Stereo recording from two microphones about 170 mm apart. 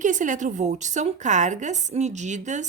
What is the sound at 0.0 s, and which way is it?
A woman's voice, 50° right (ahead or behind).